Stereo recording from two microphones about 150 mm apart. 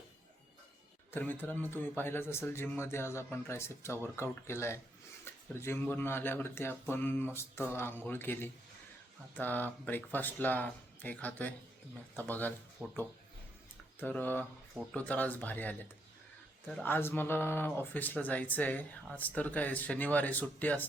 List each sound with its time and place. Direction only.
1.1 s speech: 10° left (ahead or behind)
5.2 s a sound: 15° left (ahead or behind)
5.8 s speech: 15° left (ahead or behind)
12.8 s speech: 10° right (ahead or behind)
14.0 s speech: 15° left (ahead or behind)